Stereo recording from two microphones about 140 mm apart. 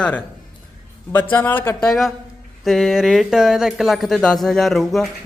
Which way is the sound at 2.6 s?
Centre (ahead or behind).